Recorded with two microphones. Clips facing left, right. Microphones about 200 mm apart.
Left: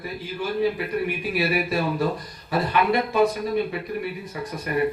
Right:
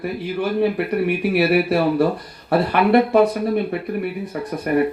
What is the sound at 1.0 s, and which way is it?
Speech, 65° right (ahead or behind).